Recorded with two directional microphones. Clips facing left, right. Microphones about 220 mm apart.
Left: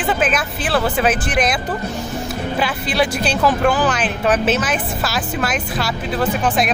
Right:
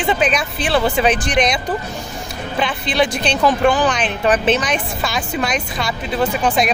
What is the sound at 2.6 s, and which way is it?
Speech, 5° left (ahead or behind).